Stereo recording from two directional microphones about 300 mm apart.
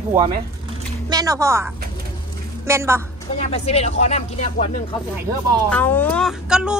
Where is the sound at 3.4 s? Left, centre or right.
Centre.